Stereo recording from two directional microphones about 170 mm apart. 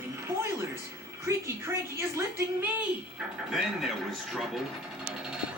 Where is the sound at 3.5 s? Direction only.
Centre (ahead or behind).